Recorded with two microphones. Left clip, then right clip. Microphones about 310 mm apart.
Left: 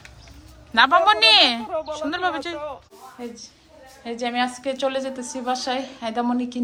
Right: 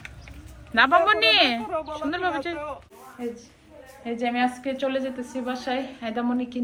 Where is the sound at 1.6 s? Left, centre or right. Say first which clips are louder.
Left 2 dB; left.